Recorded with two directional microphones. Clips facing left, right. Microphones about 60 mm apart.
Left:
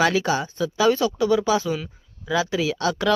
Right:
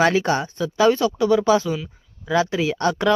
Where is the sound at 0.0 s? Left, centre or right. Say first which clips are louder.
Right 2 dB; right.